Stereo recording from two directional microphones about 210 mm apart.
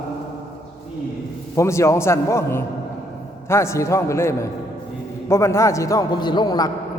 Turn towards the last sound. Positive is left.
turn(degrees=20)  # may be behind; listen again after turning